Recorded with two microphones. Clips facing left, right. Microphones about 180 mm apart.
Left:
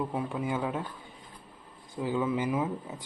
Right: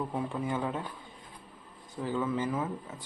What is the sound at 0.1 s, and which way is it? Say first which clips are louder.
Speech: left 1 dB; 10° left (ahead or behind).